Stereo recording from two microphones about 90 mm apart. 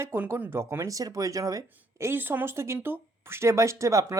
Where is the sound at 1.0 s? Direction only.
40° right (ahead or behind).